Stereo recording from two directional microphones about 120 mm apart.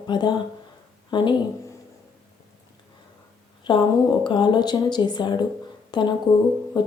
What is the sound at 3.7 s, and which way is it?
Speech, 40° left (ahead or behind).